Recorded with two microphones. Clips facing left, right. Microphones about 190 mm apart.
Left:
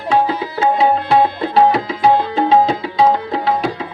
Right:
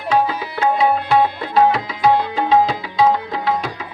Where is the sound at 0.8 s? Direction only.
30° left (ahead or behind).